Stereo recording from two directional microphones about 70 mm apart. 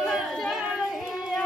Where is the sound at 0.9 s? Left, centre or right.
Centre.